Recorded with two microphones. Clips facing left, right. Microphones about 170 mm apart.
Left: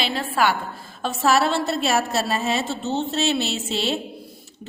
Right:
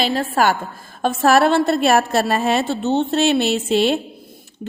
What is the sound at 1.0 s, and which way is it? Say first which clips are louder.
A woman's voice: right 5 dB; 55° right (ahead or behind).